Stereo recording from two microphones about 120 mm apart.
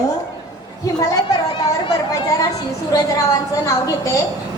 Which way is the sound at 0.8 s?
30° left (ahead or behind).